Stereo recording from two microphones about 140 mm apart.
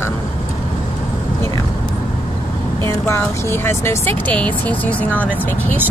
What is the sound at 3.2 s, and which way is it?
Speech, 15° left (ahead or behind).